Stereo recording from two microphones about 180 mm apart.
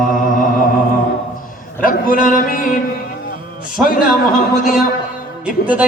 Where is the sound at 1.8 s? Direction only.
50° left (ahead or behind).